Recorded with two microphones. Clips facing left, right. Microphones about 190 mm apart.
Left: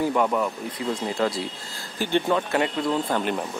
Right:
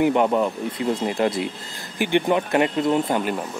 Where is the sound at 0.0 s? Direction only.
20° right (ahead or behind).